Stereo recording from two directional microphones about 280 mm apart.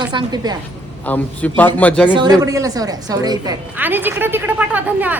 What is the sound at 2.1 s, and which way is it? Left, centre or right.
A woman's voice, centre.